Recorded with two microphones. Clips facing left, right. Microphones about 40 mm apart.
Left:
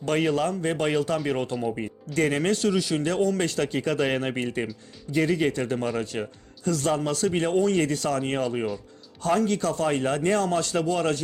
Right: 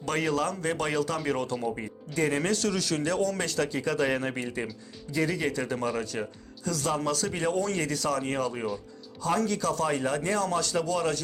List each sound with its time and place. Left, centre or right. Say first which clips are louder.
0.0 s a man's voice: left 4 dB; left
1.5 s speech: left 3 dB; centre
2.1 s speech: left 3 dB; left
2.4 s a man's voice: left 4 dB; left
2.7 s a man's voice: left 4 dB; centre
3.1 s speech: left 5 dB; left